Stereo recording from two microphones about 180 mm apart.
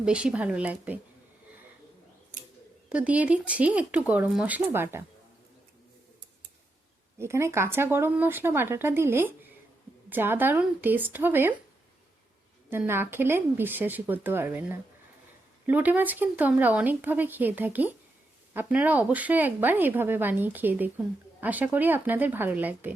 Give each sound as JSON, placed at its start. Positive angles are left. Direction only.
{"t": 0.0, "sound": "speech", "side_deg": -5}
{"t": 2.9, "sound": "speech", "side_deg": -5}
{"t": 7.2, "sound": "speech", "side_deg": -15}
{"t": 12.7, "sound": "speech", "side_deg": -10}